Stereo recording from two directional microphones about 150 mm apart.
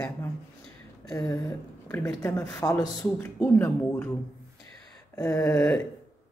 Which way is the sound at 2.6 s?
20° left (ahead or behind).